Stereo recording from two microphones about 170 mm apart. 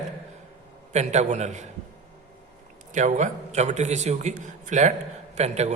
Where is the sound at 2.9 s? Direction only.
45° right (ahead or behind).